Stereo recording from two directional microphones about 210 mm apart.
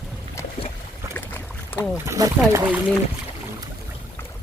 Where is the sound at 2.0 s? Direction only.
15° right (ahead or behind).